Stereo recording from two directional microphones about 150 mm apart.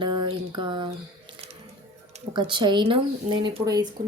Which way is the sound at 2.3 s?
30° right (ahead or behind).